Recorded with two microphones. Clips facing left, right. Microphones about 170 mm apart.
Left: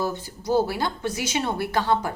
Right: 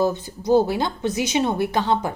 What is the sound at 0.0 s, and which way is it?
Speech, 20° right (ahead or behind).